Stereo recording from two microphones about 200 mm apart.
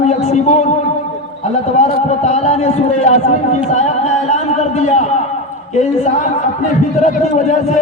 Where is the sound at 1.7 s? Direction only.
35° left (ahead or behind).